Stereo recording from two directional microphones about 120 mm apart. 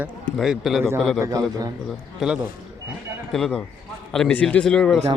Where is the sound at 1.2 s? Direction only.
30° right (ahead or behind).